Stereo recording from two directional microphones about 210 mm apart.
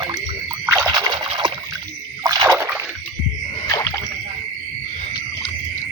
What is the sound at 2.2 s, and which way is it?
Splash, 15° right (ahead or behind).